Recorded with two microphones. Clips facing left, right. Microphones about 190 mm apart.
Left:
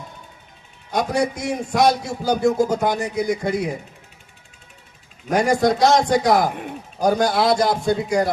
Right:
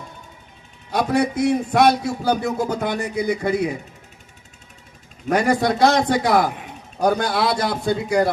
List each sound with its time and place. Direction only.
0.9 s a man's voice: 60° right (ahead or behind)
5.3 s a man's voice: 60° right (ahead or behind)